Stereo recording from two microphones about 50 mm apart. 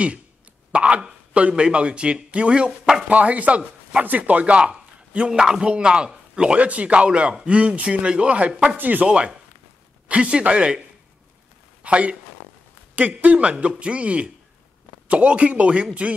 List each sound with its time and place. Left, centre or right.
0.7 s a sound: right
1.5 s speech: right
3.1 s a man's voice: right
8.7 s speech: right
10.0 s speech: right
11.8 s speech: right